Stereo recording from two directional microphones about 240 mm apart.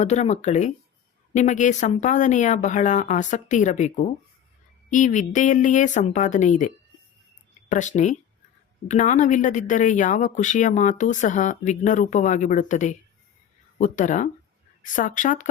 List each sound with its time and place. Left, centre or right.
0.0 s speech: left